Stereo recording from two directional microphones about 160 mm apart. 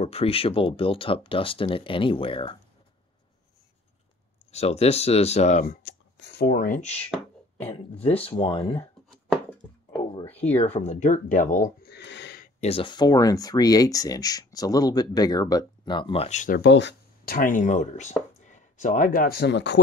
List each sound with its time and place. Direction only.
0.0 s speech: 35° left (ahead or behind)
4.5 s speech: 40° left (ahead or behind)
5.7 s speech: 80° left; by 8.8 s 40° left (ahead or behind)
10.2 s a sound: 10° left (ahead or behind)
10.5 s speech: 40° left (ahead or behind); by 11.9 s 55° left (ahead or behind)
11.9 s a sound: 90° left
12.5 s speech: 40° left (ahead or behind)
16.5 s speech: 90° left